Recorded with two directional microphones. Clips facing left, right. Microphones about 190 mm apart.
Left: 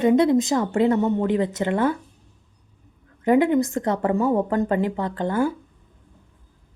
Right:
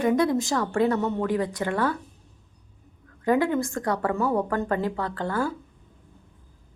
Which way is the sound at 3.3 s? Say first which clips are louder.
Left 5 dB; 20° left (ahead or behind).